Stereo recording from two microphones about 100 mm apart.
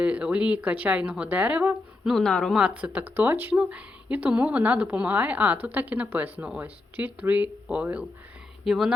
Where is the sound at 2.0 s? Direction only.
5° left (ahead or behind).